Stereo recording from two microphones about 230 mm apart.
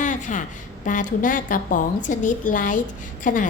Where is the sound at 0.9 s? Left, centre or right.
Left.